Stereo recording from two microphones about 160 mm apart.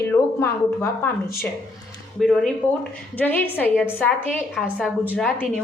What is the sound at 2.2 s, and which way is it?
A woman's voice, 5° left (ahead or behind).